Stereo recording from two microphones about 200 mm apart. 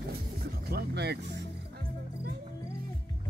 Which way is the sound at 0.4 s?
50° right (ahead or behind).